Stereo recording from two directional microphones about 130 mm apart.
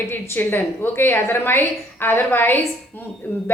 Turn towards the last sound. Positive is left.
turn(degrees=15)  # may be behind; listen again after turning